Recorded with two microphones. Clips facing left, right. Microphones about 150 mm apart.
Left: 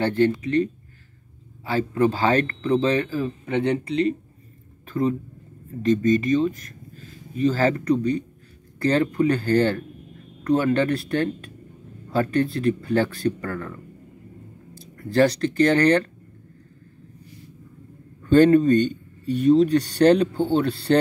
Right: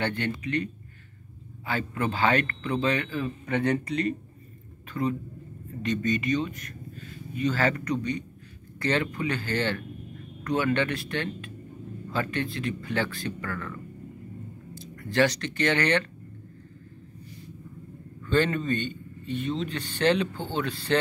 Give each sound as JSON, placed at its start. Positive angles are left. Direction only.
{"t": 0.0, "sound": "speech", "side_deg": 35}
{"t": 1.7, "sound": "speech", "side_deg": 35}
{"t": 3.4, "sound": "speech", "side_deg": 25}
{"t": 5.8, "sound": "speech", "side_deg": 40}
{"t": 15.0, "sound": "speech", "side_deg": 35}
{"t": 18.2, "sound": "speech", "side_deg": 45}